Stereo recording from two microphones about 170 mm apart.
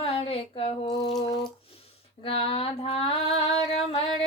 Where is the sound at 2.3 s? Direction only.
35° left (ahead or behind).